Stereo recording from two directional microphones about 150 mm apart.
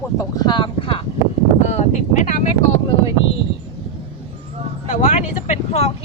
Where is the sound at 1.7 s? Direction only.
50° left (ahead or behind).